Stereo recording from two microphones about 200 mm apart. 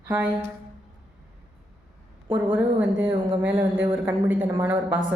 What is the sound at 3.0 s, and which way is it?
Speech, 10° right (ahead or behind).